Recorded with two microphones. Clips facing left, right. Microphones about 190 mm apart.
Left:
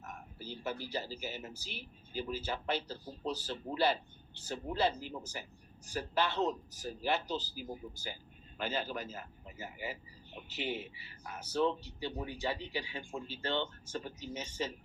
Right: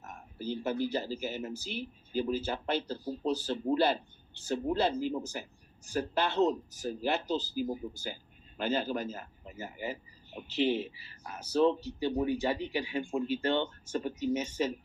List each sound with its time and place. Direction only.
0.0 s speech: 50° right (ahead or behind)